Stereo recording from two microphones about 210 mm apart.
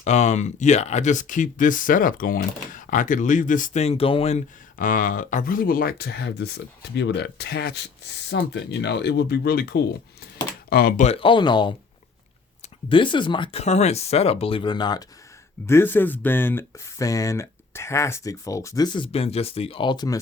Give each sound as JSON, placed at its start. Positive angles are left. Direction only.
{"t": 0.0, "sound": "speech", "side_deg": 35}
{"t": 12.9, "sound": "speech", "side_deg": 25}